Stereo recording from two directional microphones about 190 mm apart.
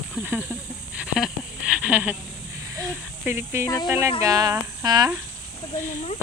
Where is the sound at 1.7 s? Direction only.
5° right (ahead or behind).